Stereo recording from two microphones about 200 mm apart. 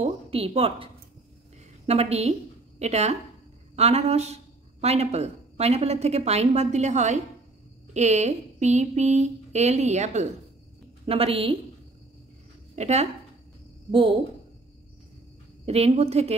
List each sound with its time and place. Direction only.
0.0 s a woman's voice: 30° right (ahead or behind)
1.9 s a woman's voice: 30° right (ahead or behind)
12.7 s speech: 35° right (ahead or behind)
15.6 s speech: 30° right (ahead or behind)